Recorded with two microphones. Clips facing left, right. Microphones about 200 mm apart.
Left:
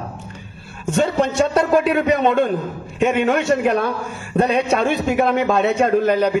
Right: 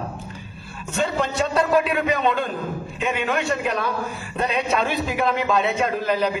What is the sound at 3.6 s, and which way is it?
Speech, 50° left (ahead or behind).